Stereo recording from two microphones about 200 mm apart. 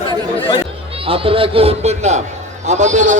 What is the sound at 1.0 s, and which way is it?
A man's voice, 25° right (ahead or behind).